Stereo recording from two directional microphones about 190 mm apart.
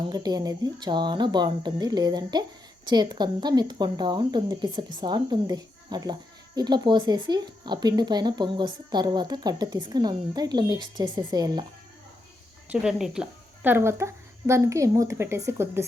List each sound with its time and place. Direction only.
0.1 s speech: 20° right (ahead or behind)
12.7 s speech: 5° right (ahead or behind)